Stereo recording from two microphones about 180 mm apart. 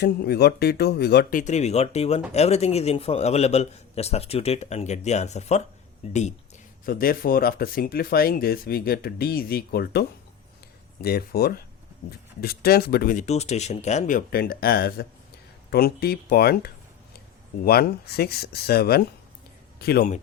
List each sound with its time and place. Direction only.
0.0 s speech: 65° left (ahead or behind)
1.4 s a man's voice: 40° left (ahead or behind)
6.8 s a man's voice: 55° left (ahead or behind)